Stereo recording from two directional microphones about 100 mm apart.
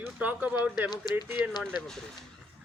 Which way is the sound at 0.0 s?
15° right (ahead or behind).